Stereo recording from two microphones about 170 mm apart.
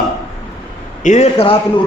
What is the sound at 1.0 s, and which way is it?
Speech, 45° left (ahead or behind).